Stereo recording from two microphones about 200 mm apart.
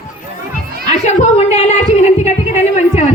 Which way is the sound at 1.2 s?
35° left (ahead or behind).